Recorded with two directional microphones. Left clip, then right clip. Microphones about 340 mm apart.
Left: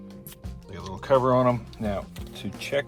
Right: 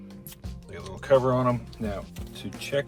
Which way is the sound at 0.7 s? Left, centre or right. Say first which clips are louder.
Even; centre.